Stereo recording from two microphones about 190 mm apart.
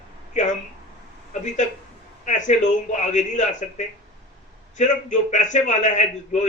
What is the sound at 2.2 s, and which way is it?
A man's voice, 40° left (ahead or behind).